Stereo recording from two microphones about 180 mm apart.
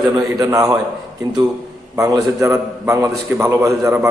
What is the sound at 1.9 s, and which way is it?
A man's voice, 20° right (ahead or behind).